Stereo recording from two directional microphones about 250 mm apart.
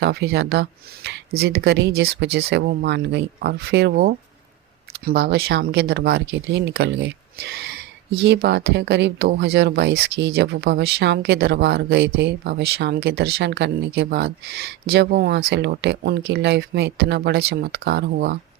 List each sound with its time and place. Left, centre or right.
0.0 s speech: right